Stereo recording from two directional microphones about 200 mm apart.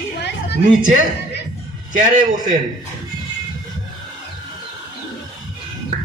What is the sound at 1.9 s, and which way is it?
Speech, 40° right (ahead or behind).